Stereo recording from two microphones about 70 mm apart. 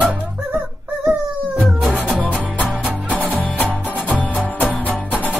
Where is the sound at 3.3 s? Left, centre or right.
Left.